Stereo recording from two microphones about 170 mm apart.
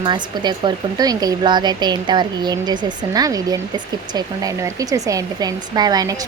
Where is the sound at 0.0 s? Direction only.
25° right (ahead or behind).